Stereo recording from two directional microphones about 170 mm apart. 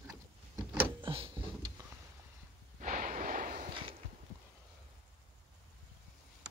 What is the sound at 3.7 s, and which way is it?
Walk, 30° right (ahead or behind).